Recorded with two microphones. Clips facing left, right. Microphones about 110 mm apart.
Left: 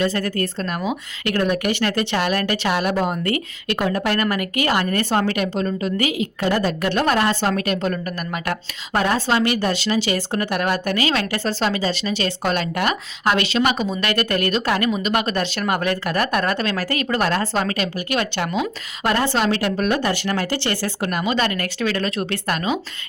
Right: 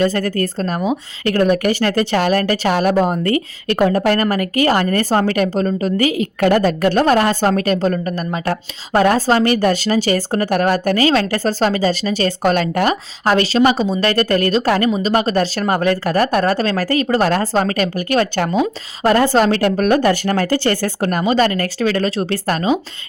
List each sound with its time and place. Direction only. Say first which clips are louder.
0.0 s a woman's voice: right 4 dB; 40° right (ahead or behind)
6.4 s a woman's voice: right 7 dB; 55° right (ahead or behind); by 22.8 s 35° right (ahead or behind)